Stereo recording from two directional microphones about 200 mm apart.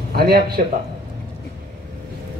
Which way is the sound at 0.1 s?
50° right (ahead or behind).